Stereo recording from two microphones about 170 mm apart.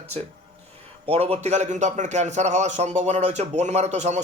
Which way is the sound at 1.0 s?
35° right (ahead or behind).